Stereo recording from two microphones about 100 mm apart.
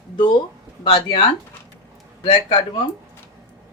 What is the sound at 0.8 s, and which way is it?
Speech, 70° left (ahead or behind).